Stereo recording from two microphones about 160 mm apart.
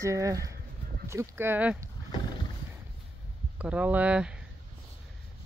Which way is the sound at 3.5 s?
10° right (ahead or behind).